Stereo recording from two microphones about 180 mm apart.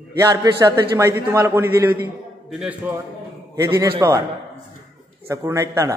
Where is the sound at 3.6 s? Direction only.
15° right (ahead or behind).